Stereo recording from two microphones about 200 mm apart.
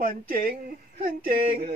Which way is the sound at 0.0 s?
45° right (ahead or behind).